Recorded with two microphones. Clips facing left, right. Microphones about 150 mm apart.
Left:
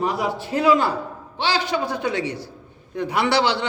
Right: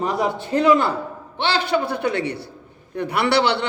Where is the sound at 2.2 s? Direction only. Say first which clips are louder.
Right 1 dB; 60° right (ahead or behind).